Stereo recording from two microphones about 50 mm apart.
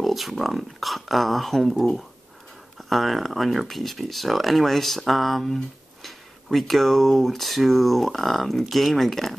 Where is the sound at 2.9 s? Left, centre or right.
Centre.